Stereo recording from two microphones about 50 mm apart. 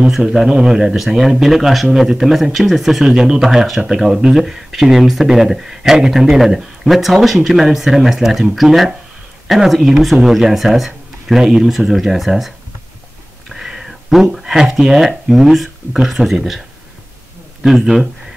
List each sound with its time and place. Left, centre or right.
0.0 s speech: centre
13.6 s speech: centre
17.6 s speech: centre